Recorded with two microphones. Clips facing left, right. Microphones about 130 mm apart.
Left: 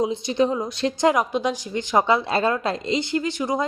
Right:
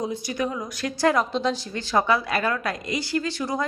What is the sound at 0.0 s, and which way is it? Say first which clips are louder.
Speech: left 6 dB; 25° left (ahead or behind).